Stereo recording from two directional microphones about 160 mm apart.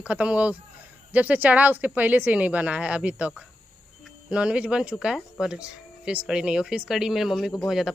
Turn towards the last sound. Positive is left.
turn(degrees=0)  # may be behind; listen again after turning